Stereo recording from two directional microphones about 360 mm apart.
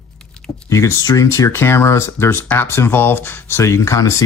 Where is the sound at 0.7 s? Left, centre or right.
Centre.